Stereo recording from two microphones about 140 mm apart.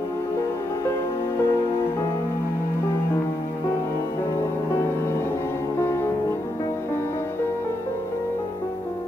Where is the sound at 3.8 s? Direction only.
20° left (ahead or behind).